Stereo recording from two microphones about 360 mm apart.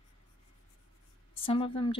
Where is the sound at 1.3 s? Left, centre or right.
Centre.